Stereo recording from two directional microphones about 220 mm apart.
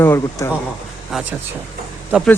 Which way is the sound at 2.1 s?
5° right (ahead or behind).